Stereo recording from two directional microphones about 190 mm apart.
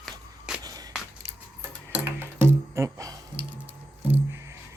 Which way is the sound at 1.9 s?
10° right (ahead or behind).